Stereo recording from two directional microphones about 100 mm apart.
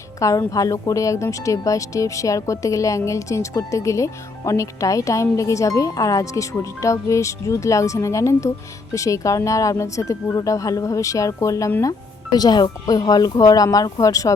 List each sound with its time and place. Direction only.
0.2 s a woman's voice: 35° left (ahead or behind)